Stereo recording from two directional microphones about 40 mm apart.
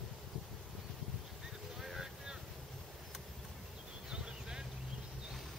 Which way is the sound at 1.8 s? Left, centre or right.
Centre.